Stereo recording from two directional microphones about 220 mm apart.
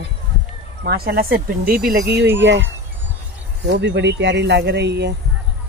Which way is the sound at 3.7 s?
50° right (ahead or behind).